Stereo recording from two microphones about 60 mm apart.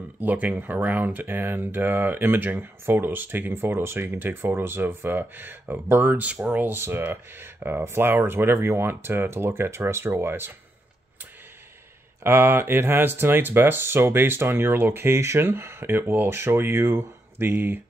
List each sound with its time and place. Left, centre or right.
0.2 s speech: right
6.2 s speech: right
6.8 s speech: right
12.2 s speech: right